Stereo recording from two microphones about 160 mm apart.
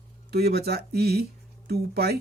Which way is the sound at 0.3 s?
85° right.